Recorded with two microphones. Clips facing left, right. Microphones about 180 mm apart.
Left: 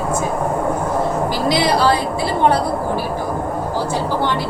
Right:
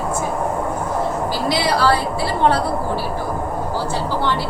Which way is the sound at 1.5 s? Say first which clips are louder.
Left 2 dB; 20° left (ahead or behind).